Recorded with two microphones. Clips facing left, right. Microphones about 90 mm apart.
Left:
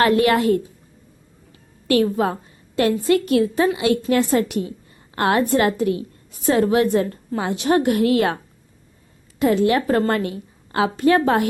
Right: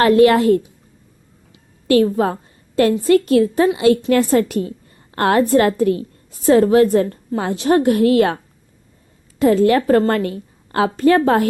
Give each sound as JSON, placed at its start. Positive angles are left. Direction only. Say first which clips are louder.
{"t": 0.0, "sound": "a woman's voice", "louder": "right 5 dB", "side_deg": -30}
{"t": 1.9, "sound": "a woman's voice", "louder": "right 3 dB", "side_deg": -35}
{"t": 9.4, "sound": "a woman's voice", "louder": "right 4 dB", "side_deg": -40}